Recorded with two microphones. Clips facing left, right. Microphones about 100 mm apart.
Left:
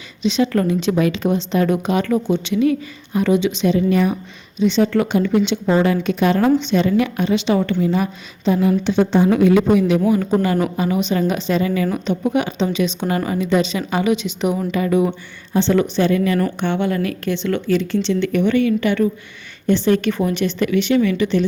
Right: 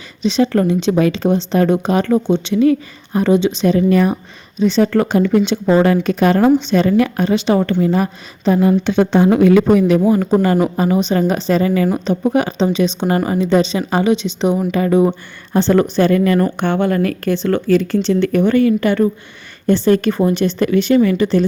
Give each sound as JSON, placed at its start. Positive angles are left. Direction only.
{"t": 0.2, "sound": "speech", "side_deg": -35}
{"t": 3.8, "sound": "speech", "side_deg": -50}
{"t": 5.5, "sound": "speech", "side_deg": -40}
{"t": 8.9, "sound": "a woman's voice", "side_deg": -60}